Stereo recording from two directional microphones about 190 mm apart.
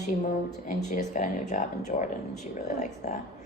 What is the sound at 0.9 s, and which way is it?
A woman's voice, 40° left (ahead or behind).